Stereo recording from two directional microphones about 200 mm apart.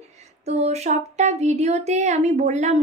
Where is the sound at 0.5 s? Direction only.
35° right (ahead or behind).